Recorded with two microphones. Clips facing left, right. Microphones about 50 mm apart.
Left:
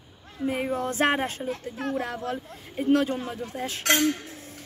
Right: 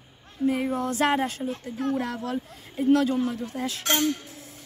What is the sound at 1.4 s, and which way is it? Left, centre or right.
Speech, left.